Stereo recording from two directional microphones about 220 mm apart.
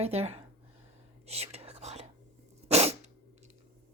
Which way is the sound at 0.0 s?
30° right (ahead or behind).